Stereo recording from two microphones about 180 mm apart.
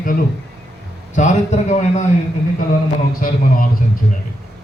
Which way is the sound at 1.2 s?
40° left (ahead or behind).